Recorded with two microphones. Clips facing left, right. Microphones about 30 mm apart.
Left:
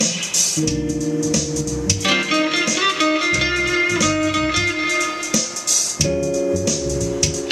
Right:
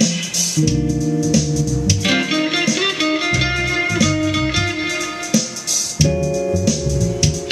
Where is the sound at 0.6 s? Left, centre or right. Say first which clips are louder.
Right 5 dB; centre.